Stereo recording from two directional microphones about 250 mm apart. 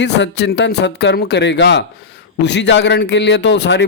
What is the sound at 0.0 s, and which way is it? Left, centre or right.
A man's voice, left.